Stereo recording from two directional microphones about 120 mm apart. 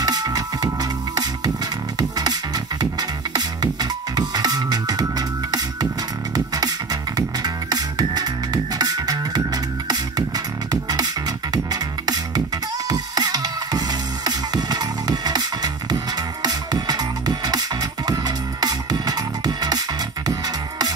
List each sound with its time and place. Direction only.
0.0 s music: 30° right (ahead or behind)